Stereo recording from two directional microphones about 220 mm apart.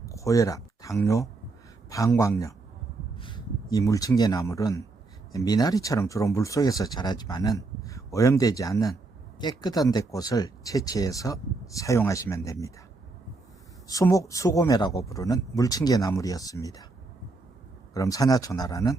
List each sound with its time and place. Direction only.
0.0 s speech: 15° left (ahead or behind)
13.8 s speech: 15° left (ahead or behind)
17.9 s speech: 15° left (ahead or behind)